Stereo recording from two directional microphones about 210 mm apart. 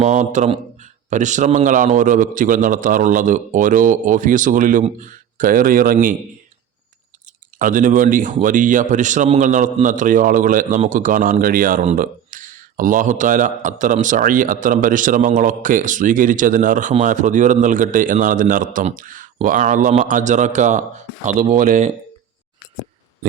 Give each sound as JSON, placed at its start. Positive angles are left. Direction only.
{"t": 0.0, "sound": "a man's voice", "side_deg": -35}
{"t": 7.6, "sound": "a man's voice", "side_deg": -40}